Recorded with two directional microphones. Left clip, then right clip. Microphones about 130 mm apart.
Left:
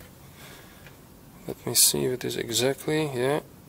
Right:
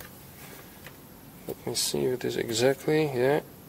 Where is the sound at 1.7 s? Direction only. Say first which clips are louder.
Left 4 dB; 20° left (ahead or behind).